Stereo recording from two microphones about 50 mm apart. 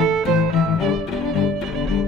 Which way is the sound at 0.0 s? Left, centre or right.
Centre.